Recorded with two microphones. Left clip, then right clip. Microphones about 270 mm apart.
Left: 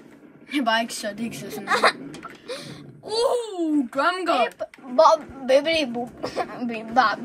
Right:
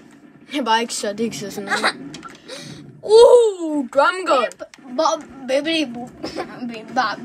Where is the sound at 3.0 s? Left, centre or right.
Centre.